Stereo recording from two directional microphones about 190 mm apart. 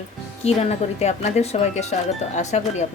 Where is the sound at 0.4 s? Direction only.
35° left (ahead or behind).